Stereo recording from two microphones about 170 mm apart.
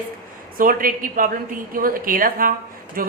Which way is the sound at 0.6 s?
55° right (ahead or behind).